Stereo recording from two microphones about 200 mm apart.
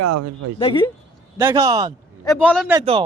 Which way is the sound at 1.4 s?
15° right (ahead or behind).